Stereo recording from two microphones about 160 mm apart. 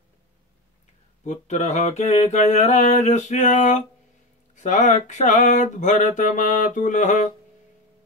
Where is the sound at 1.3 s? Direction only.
45° left (ahead or behind).